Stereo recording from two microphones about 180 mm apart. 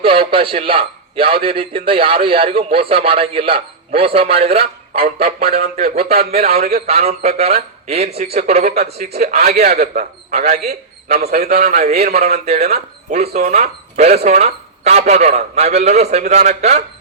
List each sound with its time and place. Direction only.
0.0 s a man's voice: 30° right (ahead or behind)